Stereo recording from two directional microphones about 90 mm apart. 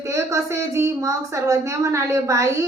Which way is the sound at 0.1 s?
35° right (ahead or behind).